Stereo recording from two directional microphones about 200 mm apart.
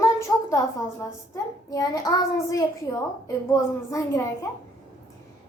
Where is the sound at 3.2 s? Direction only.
15° left (ahead or behind).